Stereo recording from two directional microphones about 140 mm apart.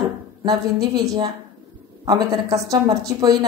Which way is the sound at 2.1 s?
25° right (ahead or behind).